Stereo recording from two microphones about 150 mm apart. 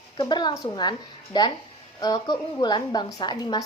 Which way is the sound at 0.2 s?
30° left (ahead or behind).